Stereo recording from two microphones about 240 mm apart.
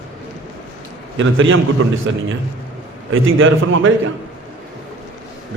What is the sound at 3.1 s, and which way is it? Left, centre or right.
A man's voice, right.